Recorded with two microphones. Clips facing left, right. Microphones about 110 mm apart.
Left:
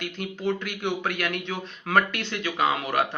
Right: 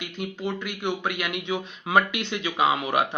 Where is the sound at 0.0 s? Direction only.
5° right (ahead or behind).